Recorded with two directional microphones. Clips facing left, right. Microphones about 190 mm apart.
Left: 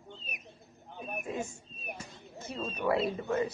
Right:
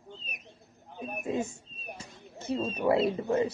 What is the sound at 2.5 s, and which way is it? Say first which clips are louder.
Speech: right 4 dB; 30° right (ahead or behind).